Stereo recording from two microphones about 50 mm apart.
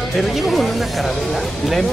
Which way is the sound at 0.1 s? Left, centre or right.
Centre.